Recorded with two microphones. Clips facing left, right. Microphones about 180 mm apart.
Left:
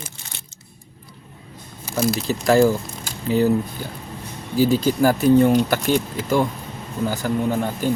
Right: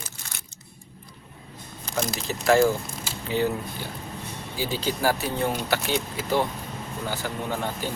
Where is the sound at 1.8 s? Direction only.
5° left (ahead or behind).